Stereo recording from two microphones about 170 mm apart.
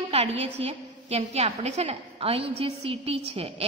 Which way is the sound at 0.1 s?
35° right (ahead or behind).